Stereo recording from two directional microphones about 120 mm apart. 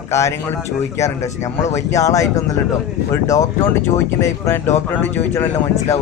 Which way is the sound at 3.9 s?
25° left (ahead or behind).